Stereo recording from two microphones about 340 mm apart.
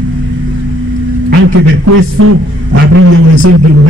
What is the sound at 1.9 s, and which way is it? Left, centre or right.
A man's voice, right.